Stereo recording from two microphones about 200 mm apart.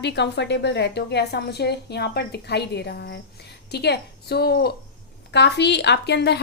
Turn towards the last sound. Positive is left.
turn(degrees=55)  # may be behind; listen again after turning